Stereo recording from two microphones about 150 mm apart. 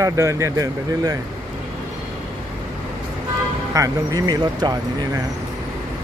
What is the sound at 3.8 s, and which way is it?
Speech, 25° right (ahead or behind).